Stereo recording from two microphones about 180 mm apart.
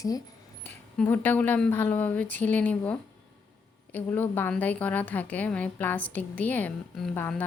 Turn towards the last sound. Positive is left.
turn(degrees=10)  # may be behind; listen again after turning